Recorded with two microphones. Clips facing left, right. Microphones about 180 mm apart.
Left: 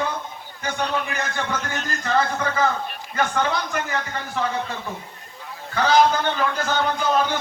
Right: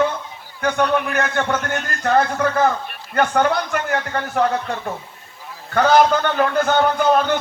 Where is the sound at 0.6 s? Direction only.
60° right (ahead or behind).